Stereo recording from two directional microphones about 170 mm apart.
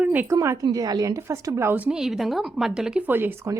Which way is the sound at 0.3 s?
20° right (ahead or behind).